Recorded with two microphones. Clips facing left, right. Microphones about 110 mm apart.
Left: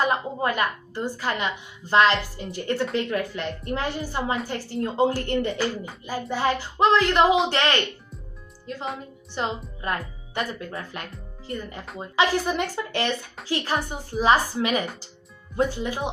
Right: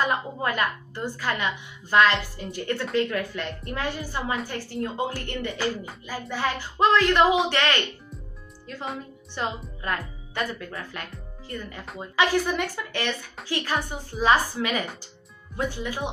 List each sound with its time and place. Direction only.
0.0 s a woman's voice: 25° left (ahead or behind)
9.4 s a woman's voice: 20° left (ahead or behind)
13.7 s a woman's voice: 15° left (ahead or behind)